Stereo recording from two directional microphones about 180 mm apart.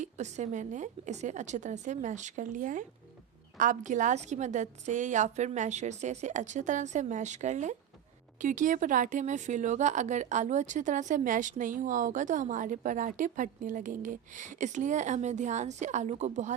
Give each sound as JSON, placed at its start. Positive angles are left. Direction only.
{"t": 0.0, "sound": "a woman's voice", "side_deg": -40}